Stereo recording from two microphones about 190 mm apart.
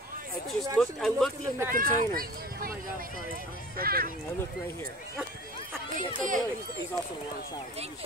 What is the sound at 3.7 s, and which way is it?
Speech, 50° right (ahead or behind).